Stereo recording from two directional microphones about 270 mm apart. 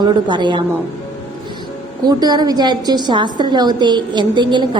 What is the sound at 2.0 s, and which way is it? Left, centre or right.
A woman's voice, centre.